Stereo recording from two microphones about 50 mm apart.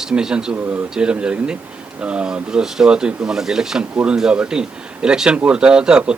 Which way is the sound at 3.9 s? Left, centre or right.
Right.